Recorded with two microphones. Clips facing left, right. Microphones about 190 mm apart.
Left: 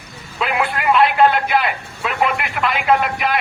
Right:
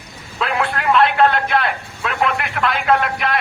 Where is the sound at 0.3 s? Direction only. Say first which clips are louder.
Even; 5° left (ahead or behind).